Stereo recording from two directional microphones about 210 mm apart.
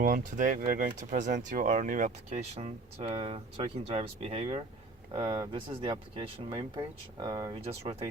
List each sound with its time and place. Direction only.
0.0 s speech: 40° right (ahead or behind)